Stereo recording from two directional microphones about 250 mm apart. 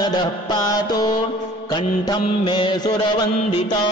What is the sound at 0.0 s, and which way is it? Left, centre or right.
Mantra, centre.